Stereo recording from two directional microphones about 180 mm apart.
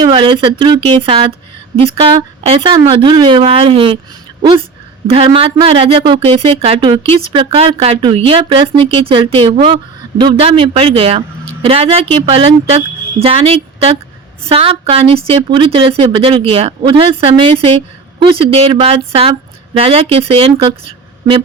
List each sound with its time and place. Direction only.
0.0 s speech: 25° right (ahead or behind)
5.0 s speech: 30° right (ahead or behind)